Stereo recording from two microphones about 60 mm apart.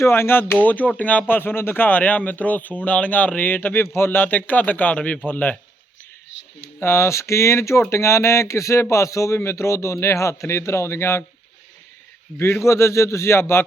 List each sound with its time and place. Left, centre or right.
0.0 s speech: left
0.5 s speech: left
6.7 s speech: left
12.4 s speech: left